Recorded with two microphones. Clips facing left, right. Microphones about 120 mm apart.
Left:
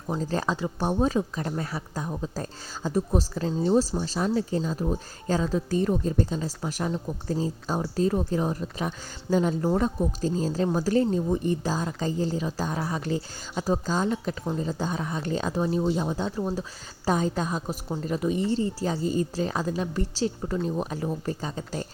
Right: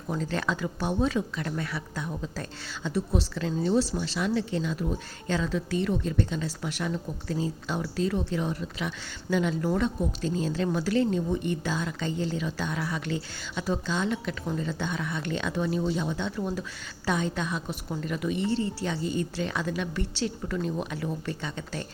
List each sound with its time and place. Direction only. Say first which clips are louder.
0.1 s speech: left 2 dB; 35° left (ahead or behind)
3.5 s speech: left 3 dB; 30° left (ahead or behind)
3.8 s speech: left 2 dB; 40° left (ahead or behind)